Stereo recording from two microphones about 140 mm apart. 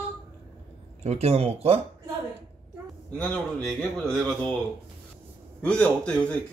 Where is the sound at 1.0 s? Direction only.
50° right (ahead or behind).